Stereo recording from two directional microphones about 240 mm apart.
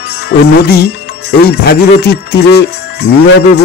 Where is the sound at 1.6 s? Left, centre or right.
Left.